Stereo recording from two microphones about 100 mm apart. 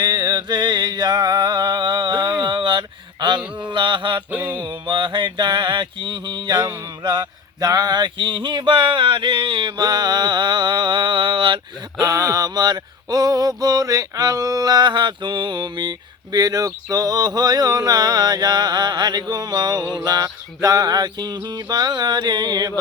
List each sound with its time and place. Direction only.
0.0 s music: 45° right (ahead or behind)
2.4 s a sound: 50° right (ahead or behind)
3.6 s mantra: 50° right (ahead or behind)
4.3 s mantra: 15° right (ahead or behind)
4.9 s mantra: 50° right (ahead or behind)
7.0 s a sound: 45° right (ahead or behind)
13.6 s male singing: 35° right (ahead or behind)
20.1 s music: 40° right (ahead or behind)